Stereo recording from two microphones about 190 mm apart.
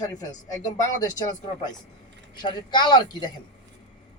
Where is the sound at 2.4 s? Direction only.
25° left (ahead or behind).